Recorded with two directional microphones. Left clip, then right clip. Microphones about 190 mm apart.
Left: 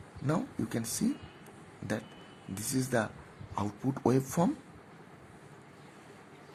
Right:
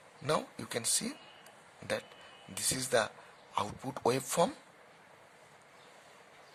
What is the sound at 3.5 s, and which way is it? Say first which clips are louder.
Speech: even; 35° right (ahead or behind).